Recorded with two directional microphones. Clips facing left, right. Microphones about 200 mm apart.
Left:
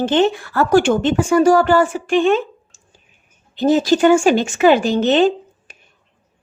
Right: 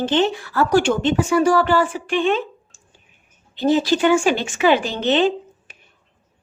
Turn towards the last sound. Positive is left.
turn(degrees=45)  # may be behind; listen again after turning